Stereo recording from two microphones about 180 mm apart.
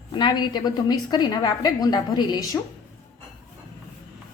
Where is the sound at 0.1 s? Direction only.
25° left (ahead or behind).